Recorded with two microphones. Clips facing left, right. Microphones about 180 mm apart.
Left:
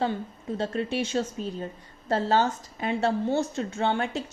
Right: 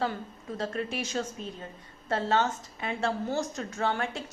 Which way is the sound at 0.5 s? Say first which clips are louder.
Left 4 dB; 30° left (ahead or behind).